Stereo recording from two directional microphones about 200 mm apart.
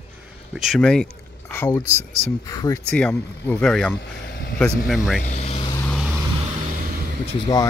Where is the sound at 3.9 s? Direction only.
50° left (ahead or behind).